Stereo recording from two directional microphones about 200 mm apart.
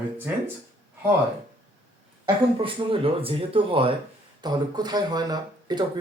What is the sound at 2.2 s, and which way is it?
Speech, 25° right (ahead or behind).